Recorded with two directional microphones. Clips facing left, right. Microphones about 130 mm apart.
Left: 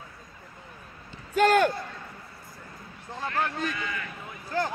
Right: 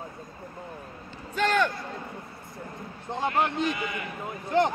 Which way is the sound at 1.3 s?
45° left (ahead or behind).